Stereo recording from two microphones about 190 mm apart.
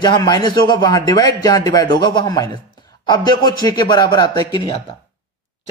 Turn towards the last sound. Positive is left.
turn(degrees=20)  # may be behind; listen again after turning